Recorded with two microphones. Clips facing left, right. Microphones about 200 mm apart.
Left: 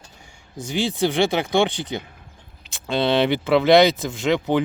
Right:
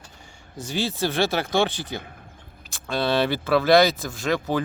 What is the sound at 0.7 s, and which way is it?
Speech, 15° left (ahead or behind).